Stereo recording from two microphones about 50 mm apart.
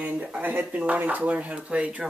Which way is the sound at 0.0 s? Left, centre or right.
Right.